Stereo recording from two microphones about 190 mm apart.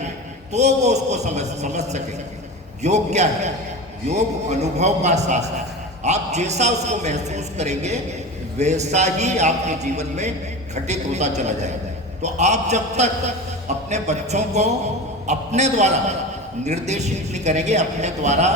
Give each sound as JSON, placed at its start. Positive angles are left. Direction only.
{"t": 0.5, "sound": "a man's voice", "side_deg": -35}